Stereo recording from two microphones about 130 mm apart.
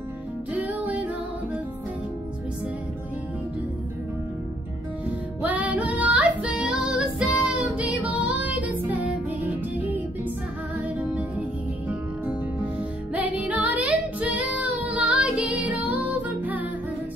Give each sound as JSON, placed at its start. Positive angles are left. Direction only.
{"t": 0.5, "sound": "music", "side_deg": -10}
{"t": 5.4, "sound": "music", "side_deg": -10}
{"t": 13.1, "sound": "music", "side_deg": -10}